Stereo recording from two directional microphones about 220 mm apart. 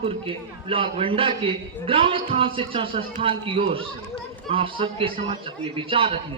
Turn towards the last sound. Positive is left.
turn(degrees=-25)  # may be behind; listen again after turning